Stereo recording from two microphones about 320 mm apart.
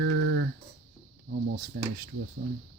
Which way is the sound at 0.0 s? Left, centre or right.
Right.